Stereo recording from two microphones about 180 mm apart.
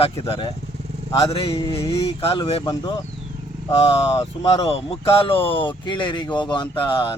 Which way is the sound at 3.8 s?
30° left (ahead or behind).